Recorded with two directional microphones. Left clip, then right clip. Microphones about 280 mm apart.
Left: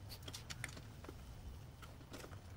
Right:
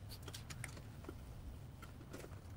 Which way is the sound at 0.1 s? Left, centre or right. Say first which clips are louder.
Left 2 dB; centre.